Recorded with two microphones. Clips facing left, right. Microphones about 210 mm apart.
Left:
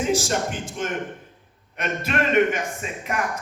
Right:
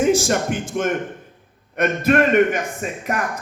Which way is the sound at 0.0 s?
50° right (ahead or behind).